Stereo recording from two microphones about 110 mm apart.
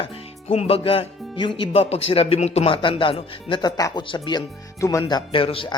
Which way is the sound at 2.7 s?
50° left (ahead or behind).